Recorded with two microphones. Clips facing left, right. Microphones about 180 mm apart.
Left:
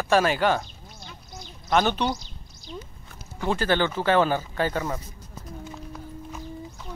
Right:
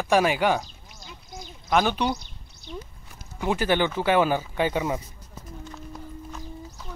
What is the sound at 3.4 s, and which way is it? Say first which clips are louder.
Speech: even; 15° right (ahead or behind).